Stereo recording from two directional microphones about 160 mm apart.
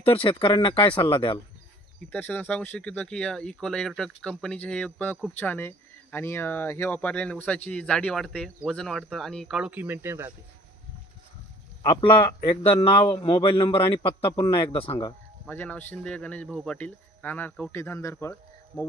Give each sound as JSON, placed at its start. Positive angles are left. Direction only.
{"t": 0.0, "sound": "a man's voice", "side_deg": 35}
{"t": 2.1, "sound": "speech", "side_deg": 10}
{"t": 11.8, "sound": "a man's voice", "side_deg": 30}
{"t": 15.4, "sound": "speech", "side_deg": 10}